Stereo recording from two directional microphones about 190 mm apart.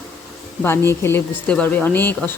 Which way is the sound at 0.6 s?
10° left (ahead or behind).